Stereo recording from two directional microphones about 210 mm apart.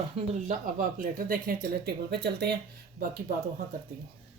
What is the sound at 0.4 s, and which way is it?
Speech, 40° right (ahead or behind).